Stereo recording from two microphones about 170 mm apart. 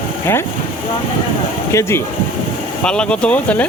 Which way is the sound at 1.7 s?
15° left (ahead or behind).